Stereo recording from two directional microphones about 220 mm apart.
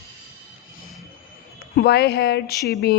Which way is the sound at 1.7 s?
45° left (ahead or behind).